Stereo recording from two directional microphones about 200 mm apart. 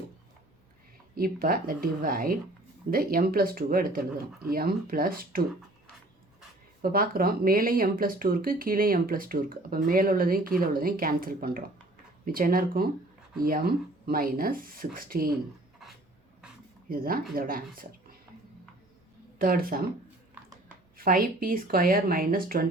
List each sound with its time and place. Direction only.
1.1 s speech: 45° right (ahead or behind)
6.8 s speech: 45° right (ahead or behind)
16.9 s speech: 45° right (ahead or behind)
19.4 s speech: 45° right (ahead or behind)
21.0 s speech: 45° right (ahead or behind)